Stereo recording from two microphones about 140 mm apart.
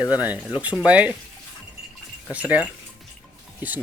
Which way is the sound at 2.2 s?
10° right (ahead or behind).